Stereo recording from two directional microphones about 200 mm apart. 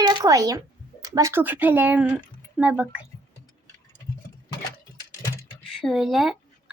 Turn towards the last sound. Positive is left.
turn(degrees=0)  # may be behind; listen again after turning